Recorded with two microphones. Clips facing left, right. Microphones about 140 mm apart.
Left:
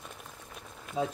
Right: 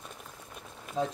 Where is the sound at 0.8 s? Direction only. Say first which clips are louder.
Even; 5° left (ahead or behind).